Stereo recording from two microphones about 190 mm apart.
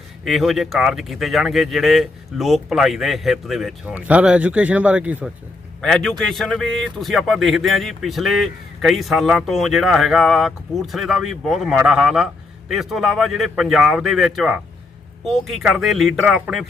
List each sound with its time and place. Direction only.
0.3 s a man's voice: centre (ahead or behind)